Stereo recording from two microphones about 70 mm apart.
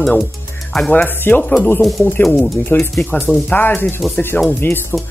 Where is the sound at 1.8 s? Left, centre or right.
Centre.